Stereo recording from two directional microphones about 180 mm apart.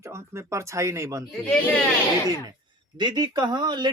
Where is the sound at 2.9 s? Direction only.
25° right (ahead or behind).